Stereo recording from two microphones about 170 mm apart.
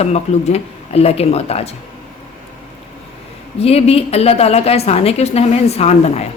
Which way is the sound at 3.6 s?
35° left (ahead or behind).